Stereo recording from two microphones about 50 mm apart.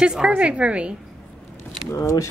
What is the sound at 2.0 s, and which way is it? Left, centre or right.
Speech, left.